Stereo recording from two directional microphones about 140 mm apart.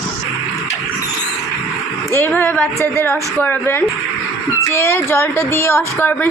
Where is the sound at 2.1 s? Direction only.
15° left (ahead or behind).